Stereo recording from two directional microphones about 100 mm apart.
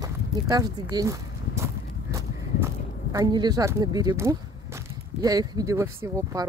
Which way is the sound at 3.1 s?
40° right (ahead or behind).